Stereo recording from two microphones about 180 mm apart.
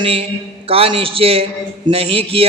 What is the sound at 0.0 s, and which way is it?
A man's voice, 30° right (ahead or behind).